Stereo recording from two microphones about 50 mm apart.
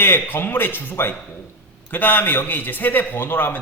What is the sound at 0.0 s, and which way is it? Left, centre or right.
A man's voice, left.